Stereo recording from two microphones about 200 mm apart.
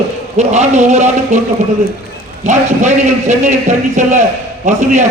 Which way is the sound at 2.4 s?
35° right (ahead or behind).